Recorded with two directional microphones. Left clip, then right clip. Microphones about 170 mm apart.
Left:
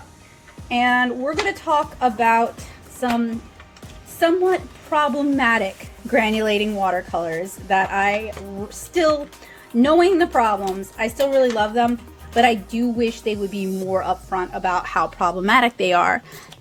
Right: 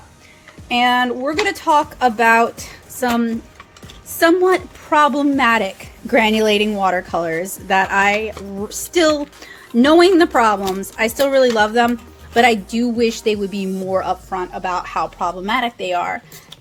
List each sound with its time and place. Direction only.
0.7 s a woman's voice: 20° right (ahead or behind); by 16.2 s 35° left (ahead or behind)